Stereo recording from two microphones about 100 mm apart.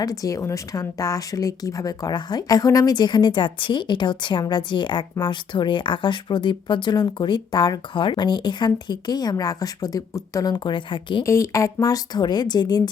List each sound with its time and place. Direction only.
0.0 s speech: 35° left (ahead or behind); by 11.2 s 55° left (ahead or behind)
11.2 s speech: 30° left (ahead or behind)